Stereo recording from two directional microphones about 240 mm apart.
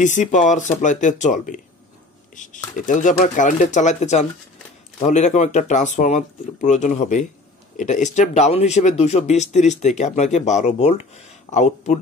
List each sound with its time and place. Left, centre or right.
0.0 s speech: left